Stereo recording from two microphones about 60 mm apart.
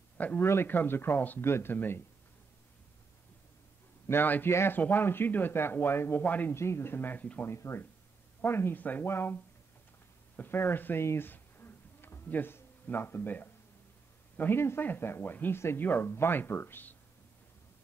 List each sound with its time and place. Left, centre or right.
0.2 s speech: left
4.1 s speech: left
4.7 s speech: left
6.2 s speech: left
6.5 s speech: left
7.4 s speech: left
11.1 s a sound: left
14.8 s speech: left